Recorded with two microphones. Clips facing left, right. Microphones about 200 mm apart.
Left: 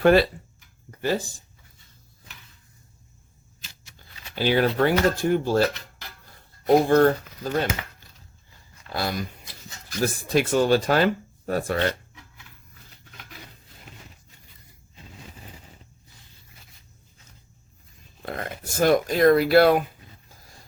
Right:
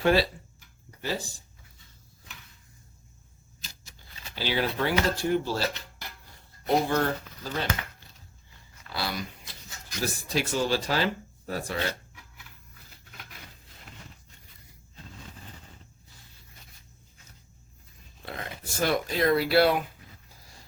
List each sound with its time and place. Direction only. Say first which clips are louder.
0.0 s speech: left 6 dB; 55° left (ahead or behind)
0.9 s a sound: left 7 dB; 55° left (ahead or behind)
3.9 s speech: left 7 dB; 50° left (ahead or behind)
6.8 s speech: left 9 dB; 50° left (ahead or behind)
8.9 s speech: left 5 dB; 50° left (ahead or behind)
18.2 s speech: left 6 dB; 50° left (ahead or behind)